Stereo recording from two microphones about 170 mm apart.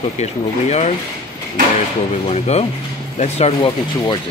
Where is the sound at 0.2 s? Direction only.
40° left (ahead or behind).